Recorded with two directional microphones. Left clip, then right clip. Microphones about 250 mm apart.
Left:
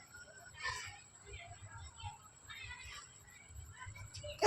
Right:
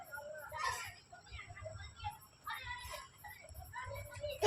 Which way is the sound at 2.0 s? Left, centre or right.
Right.